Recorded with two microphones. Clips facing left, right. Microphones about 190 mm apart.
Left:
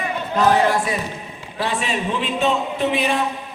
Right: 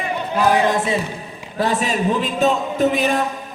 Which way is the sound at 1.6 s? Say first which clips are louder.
Right 4 dB; 40° right (ahead or behind).